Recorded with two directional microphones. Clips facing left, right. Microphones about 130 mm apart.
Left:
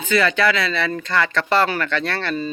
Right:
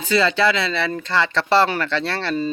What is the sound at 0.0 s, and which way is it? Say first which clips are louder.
Speech: even; 30° right (ahead or behind).